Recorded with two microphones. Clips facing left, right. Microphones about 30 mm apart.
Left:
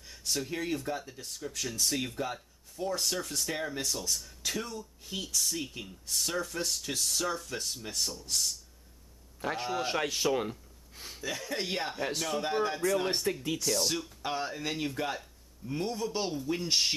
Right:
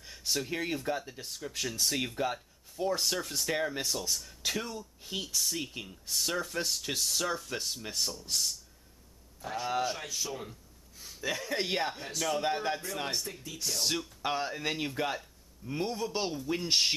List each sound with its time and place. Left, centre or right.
0.0 s speech: centre
9.4 s a man's voice: left
10.2 s a sound: left
11.2 s speech: centre
13.1 s speech: left
13.6 s speech: centre